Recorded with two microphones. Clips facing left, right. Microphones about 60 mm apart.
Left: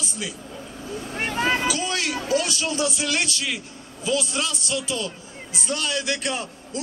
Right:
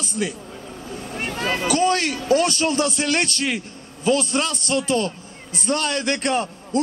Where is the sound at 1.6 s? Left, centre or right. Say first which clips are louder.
Right 6 dB; right.